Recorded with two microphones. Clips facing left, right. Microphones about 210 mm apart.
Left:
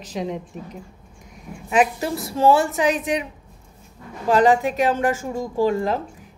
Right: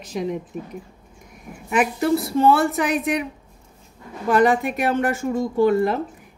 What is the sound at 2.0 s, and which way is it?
Speech, 60° right (ahead or behind).